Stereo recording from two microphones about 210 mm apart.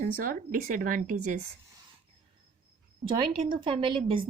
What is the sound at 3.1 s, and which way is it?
A woman's voice, 25° right (ahead or behind).